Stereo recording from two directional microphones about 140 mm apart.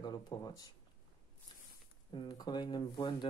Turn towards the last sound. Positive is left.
turn(degrees=35)  # may be behind; listen again after turning